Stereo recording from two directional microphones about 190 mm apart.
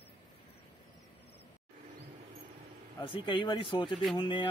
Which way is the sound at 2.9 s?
25° left (ahead or behind).